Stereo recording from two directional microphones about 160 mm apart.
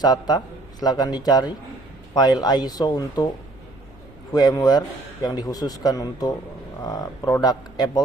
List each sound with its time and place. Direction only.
0.0 s a man's voice: 25° left (ahead or behind)
4.3 s a man's voice: 25° left (ahead or behind)